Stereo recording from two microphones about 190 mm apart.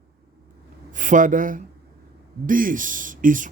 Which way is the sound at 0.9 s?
40° right (ahead or behind).